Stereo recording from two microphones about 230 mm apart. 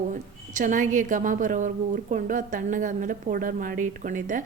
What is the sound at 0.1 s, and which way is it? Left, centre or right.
A woman's voice, right.